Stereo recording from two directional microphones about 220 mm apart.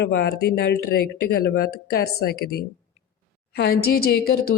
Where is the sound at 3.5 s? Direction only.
45° left (ahead or behind).